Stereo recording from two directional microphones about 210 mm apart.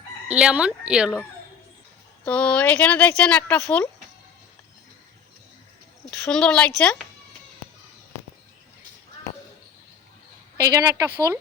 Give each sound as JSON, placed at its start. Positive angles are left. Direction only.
{"t": 0.3, "sound": "speech", "side_deg": -5}
{"t": 6.1, "sound": "a woman's voice", "side_deg": 5}
{"t": 10.6, "sound": "speech", "side_deg": -15}